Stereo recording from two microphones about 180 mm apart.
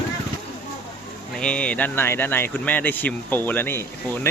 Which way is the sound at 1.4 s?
5° left (ahead or behind).